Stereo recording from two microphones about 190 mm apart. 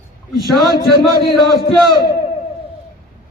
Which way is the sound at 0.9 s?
55° left (ahead or behind).